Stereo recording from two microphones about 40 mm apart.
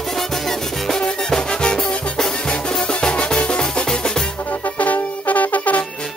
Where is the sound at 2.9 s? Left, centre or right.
Left.